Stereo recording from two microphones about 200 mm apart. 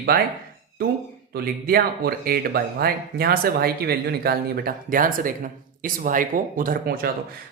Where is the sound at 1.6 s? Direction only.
50° right (ahead or behind).